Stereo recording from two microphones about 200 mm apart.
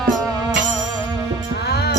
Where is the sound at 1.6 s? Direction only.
55° left (ahead or behind).